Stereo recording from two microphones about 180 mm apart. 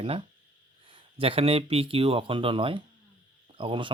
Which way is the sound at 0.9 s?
30° right (ahead or behind).